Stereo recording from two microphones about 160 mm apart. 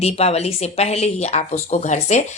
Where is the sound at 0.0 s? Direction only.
40° left (ahead or behind).